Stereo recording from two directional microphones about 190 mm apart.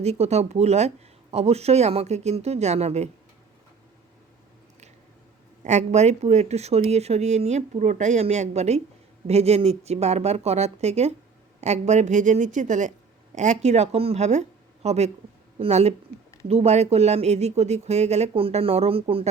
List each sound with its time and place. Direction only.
0.0 s speech: 35° right (ahead or behind)
5.6 s speech: 35° right (ahead or behind)